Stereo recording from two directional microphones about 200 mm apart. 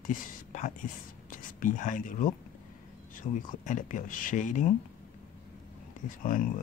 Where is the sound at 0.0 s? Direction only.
40° left (ahead or behind).